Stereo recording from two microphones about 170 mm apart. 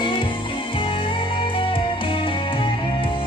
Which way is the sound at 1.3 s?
30° left (ahead or behind).